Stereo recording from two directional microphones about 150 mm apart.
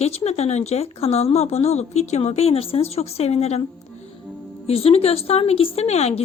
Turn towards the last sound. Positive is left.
turn(degrees=45)  # may be behind; listen again after turning